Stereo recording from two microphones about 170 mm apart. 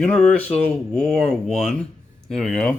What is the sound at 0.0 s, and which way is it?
Speech, 5° left (ahead or behind).